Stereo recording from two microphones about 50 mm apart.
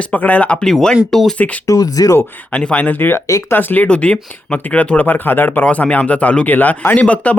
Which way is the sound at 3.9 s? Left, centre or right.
Left.